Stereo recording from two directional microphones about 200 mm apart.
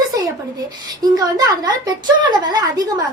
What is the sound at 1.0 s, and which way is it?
Speech, 20° right (ahead or behind).